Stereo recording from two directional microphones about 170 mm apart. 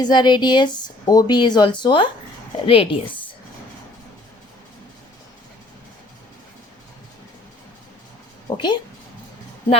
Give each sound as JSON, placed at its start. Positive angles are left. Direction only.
{"t": 0.0, "sound": "a woman's voice", "side_deg": 25}
{"t": 8.4, "sound": "speech", "side_deg": 25}